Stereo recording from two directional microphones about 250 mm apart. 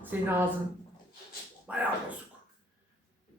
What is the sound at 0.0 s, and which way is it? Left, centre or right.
Speech, centre.